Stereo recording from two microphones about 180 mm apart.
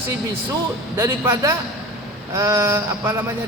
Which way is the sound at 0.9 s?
15° right (ahead or behind).